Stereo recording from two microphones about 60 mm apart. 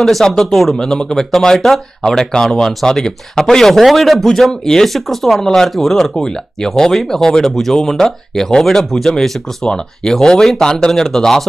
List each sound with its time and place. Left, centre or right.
0.0 s speech: centre